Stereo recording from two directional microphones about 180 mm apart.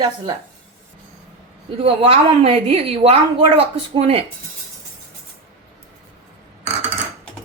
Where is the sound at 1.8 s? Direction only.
30° right (ahead or behind).